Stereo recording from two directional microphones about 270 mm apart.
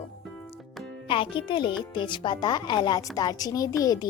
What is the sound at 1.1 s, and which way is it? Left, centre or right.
Speech, centre.